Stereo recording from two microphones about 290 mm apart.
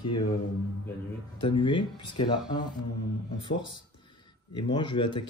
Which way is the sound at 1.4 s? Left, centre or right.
Centre.